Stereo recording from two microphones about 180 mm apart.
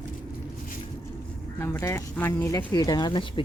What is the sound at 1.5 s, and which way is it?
Speech, 15° left (ahead or behind).